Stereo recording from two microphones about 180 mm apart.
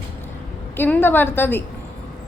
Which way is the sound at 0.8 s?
10° left (ahead or behind).